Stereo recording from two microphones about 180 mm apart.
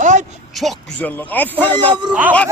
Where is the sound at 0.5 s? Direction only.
Centre (ahead or behind).